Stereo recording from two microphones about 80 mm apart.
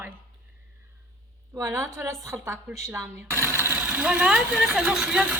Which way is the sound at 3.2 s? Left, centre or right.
Right.